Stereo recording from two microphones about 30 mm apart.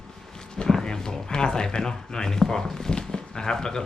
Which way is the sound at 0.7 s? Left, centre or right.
Centre.